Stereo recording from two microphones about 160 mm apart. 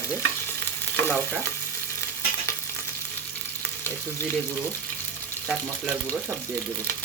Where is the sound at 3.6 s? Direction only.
15° left (ahead or behind).